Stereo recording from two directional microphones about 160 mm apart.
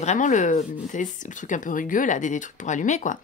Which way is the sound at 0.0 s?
50° left (ahead or behind).